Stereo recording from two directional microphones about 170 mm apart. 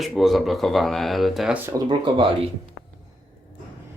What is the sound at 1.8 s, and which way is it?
Speech, 30° right (ahead or behind).